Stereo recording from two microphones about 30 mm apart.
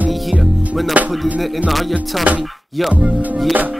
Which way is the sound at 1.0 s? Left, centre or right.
Right.